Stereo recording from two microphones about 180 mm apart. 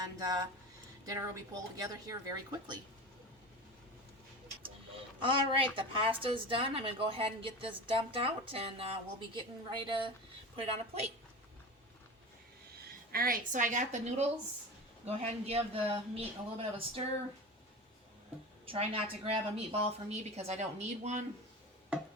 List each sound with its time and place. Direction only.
0.2 s speech: 20° right (ahead or behind)
5.2 s a woman's voice: 30° right (ahead or behind)
13.1 s a woman's voice: 55° right (ahead or behind); by 17.0 s 30° right (ahead or behind)
18.6 s a woman's voice: 30° right (ahead or behind)